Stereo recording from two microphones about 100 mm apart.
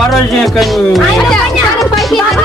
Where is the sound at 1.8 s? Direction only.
Centre (ahead or behind).